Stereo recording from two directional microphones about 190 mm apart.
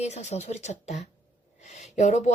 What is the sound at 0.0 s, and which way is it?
A woman's voice, 35° left (ahead or behind).